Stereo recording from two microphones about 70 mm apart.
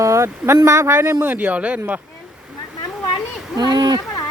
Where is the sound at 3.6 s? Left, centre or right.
Right.